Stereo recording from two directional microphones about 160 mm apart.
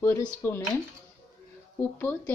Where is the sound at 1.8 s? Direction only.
10° left (ahead or behind).